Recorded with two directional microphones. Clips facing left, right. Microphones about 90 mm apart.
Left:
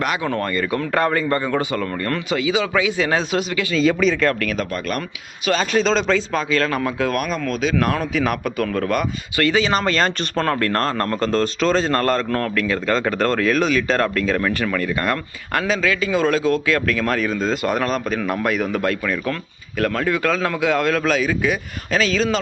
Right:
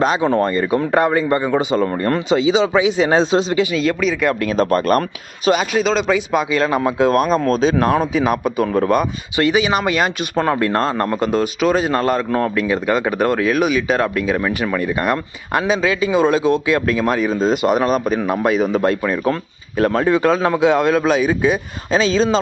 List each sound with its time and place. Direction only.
0.0 s speech: 25° right (ahead or behind)
3.8 s speech: 5° right (ahead or behind)
4.5 s speech: 40° right (ahead or behind)
5.7 s speech: 5° right (ahead or behind); by 22.4 s 25° right (ahead or behind)